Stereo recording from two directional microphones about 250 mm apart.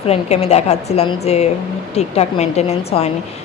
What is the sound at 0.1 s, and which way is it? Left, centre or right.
A woman's voice, left.